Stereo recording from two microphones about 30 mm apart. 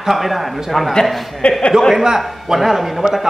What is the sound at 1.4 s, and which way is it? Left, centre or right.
Speech, left.